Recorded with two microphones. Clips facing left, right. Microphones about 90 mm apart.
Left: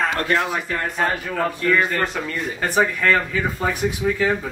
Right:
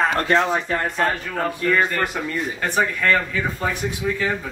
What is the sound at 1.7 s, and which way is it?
Speech, 5° left (ahead or behind).